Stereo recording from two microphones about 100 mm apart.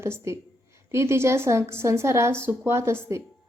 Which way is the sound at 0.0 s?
25° right (ahead or behind).